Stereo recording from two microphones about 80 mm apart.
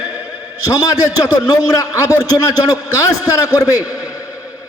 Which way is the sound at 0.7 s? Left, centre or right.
Left.